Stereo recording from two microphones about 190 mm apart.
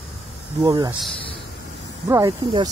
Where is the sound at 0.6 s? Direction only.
20° right (ahead or behind).